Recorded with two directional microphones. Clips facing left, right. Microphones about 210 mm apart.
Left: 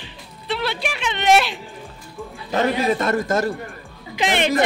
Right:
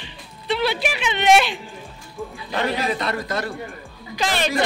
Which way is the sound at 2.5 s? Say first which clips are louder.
Left 4 dB; 45° left (ahead or behind).